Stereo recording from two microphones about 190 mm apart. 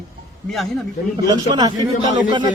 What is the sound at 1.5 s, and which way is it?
Speech, 20° right (ahead or behind).